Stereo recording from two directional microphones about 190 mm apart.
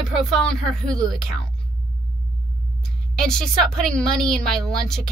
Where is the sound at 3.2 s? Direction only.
5° left (ahead or behind).